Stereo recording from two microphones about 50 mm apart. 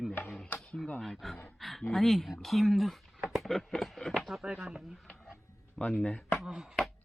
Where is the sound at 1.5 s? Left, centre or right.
Centre.